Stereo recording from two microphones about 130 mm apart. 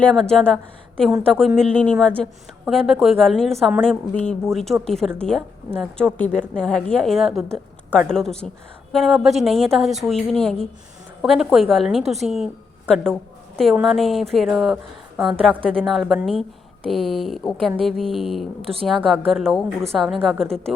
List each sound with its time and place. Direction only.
0.0 s a woman's voice: 5° left (ahead or behind)
2.6 s a woman's voice: centre (ahead or behind)
13.8 s speech: centre (ahead or behind)
18.6 s a woman's voice: 45° right (ahead or behind)
18.9 s speech: centre (ahead or behind)